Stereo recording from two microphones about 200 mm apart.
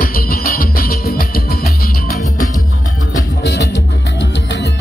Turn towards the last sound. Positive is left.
turn(degrees=60)  # may be behind; listen again after turning